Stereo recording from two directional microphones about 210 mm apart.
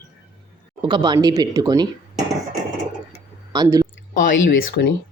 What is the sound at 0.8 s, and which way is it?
Speech, 20° right (ahead or behind).